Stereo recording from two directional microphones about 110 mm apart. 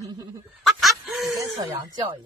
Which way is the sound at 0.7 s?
Centre (ahead or behind).